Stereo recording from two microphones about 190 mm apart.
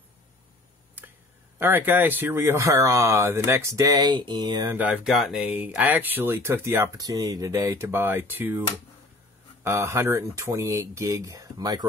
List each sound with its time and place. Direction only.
1.0 s a sound: 10° right (ahead or behind)
1.6 s speech: 10° right (ahead or behind)
4.7 s speech: 5° right (ahead or behind)